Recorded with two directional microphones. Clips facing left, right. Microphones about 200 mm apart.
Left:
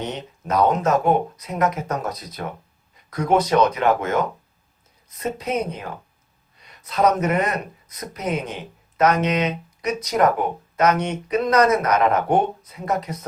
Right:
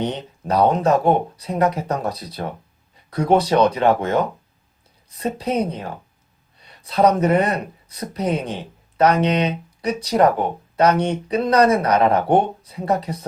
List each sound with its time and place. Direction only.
0.0 s speech: 35° right (ahead or behind)